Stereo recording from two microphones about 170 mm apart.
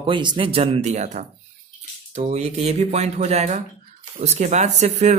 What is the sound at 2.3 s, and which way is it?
Speech, 40° right (ahead or behind).